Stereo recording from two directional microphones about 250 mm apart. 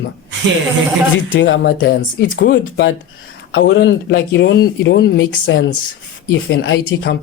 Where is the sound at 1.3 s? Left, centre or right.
Left.